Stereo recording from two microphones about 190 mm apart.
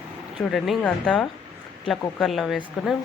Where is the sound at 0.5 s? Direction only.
Centre (ahead or behind).